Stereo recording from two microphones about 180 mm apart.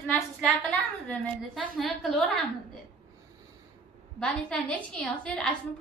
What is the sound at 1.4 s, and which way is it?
A woman's voice, centre (ahead or behind).